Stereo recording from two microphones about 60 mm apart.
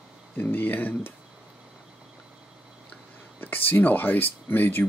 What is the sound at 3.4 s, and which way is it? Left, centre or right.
Speech, left.